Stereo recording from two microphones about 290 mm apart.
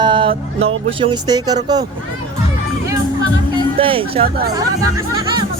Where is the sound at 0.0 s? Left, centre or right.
Centre.